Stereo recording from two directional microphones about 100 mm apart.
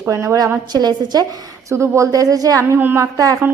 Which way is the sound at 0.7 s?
45° right (ahead or behind).